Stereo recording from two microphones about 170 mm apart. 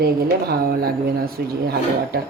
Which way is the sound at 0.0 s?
65° right (ahead or behind).